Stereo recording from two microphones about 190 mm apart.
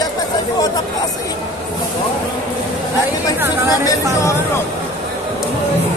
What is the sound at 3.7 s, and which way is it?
Speech, 20° left (ahead or behind).